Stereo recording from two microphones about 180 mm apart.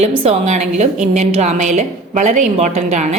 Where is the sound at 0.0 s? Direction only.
35° right (ahead or behind).